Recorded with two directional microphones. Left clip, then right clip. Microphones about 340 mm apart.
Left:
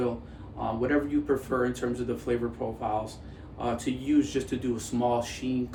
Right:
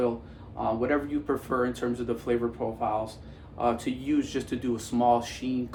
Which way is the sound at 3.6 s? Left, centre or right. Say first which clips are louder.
Right 3 dB; centre.